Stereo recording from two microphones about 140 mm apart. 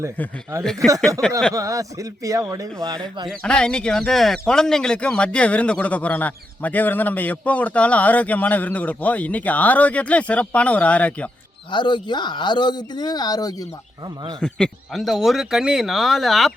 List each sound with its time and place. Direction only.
0.6 s speech: 5° left (ahead or behind)
1.5 s a man's voice: 25° right (ahead or behind)
3.2 s speech: 5° left (ahead or behind)
11.7 s speech: 35° left (ahead or behind)
14.0 s a man's voice: 30° right (ahead or behind)
14.4 s speech: 5° left (ahead or behind)